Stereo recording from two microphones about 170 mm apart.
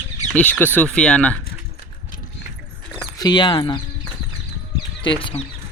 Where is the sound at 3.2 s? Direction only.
25° left (ahead or behind).